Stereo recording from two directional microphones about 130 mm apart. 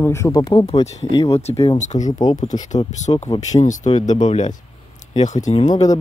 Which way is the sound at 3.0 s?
65° left (ahead or behind).